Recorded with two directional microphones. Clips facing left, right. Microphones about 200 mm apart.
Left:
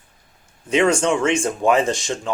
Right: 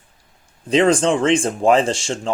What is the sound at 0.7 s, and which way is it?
Speech, 35° right (ahead or behind).